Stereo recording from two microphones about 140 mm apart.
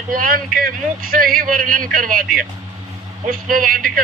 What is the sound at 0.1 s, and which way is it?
A man's voice, 85° right.